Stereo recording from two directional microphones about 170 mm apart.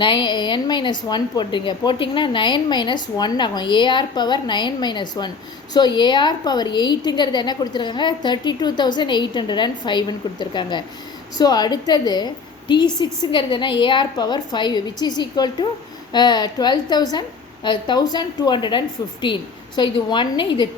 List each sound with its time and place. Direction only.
0.0 s a woman's voice: 25° left (ahead or behind)